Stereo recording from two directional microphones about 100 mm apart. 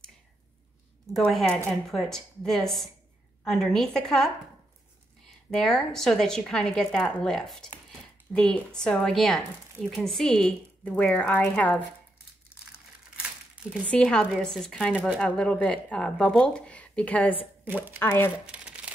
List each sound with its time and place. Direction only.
1.3 s a woman's voice: 5° left (ahead or behind)
5.5 s a woman's voice: 5° left (ahead or behind)
13.7 s a woman's voice: 15° left (ahead or behind)
17.6 s speech: 20° right (ahead or behind)
17.9 s speech: 25° left (ahead or behind)
18.5 s crumpling: 10° right (ahead or behind)